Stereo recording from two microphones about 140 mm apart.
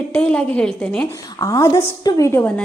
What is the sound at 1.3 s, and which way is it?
A woman's voice, 25° left (ahead or behind).